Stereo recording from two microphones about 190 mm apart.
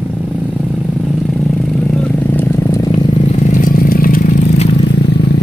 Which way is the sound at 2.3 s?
15° left (ahead or behind).